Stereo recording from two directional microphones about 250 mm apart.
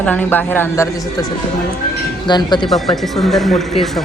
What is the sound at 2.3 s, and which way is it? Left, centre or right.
Speech, centre.